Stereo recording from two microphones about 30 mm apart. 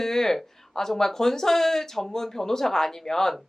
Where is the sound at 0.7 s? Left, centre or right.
Centre.